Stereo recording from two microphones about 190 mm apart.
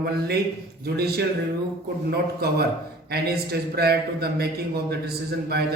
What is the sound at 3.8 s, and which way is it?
A man's voice, 55° right (ahead or behind).